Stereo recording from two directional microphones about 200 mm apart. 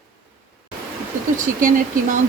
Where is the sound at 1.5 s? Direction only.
40° right (ahead or behind).